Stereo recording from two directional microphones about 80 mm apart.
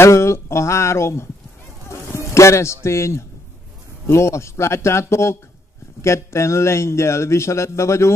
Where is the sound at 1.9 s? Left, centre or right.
Left.